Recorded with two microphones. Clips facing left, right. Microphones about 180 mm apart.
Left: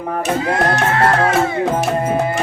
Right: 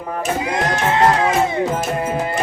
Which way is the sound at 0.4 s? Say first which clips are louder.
Left 3 dB; 15° right (ahead or behind).